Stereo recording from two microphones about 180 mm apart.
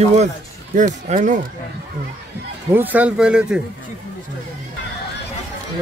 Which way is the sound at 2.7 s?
10° right (ahead or behind).